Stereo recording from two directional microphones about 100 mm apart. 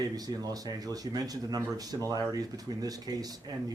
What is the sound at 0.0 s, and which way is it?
Speech, 40° right (ahead or behind).